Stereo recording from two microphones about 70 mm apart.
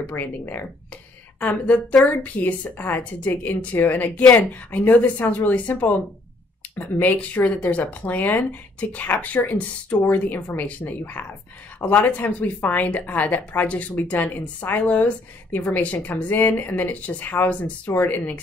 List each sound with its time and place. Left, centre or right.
0.0 s a woman's voice: left